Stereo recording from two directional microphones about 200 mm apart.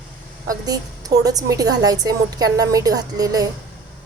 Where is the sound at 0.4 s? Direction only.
20° right (ahead or behind).